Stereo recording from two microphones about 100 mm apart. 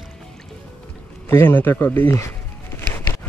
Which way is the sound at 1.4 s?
20° left (ahead or behind).